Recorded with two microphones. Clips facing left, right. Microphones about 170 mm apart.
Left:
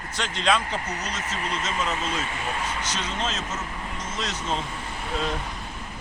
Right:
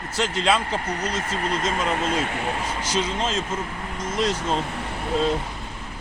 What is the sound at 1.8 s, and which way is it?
Speech, 55° right (ahead or behind).